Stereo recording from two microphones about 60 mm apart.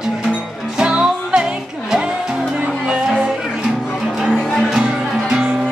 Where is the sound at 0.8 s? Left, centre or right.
Centre.